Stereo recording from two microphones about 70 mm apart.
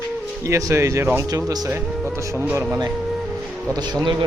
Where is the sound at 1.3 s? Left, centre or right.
Right.